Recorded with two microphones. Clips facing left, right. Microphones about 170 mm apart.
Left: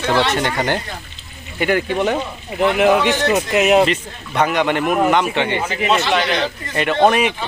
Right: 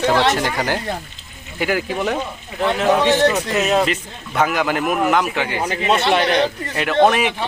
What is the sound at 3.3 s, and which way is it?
Speech, 15° left (ahead or behind).